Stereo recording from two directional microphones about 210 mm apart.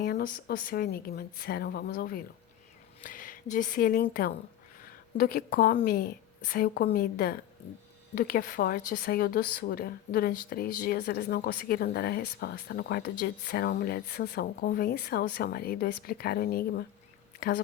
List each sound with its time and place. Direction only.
0.0 s speech: 45° left (ahead or behind)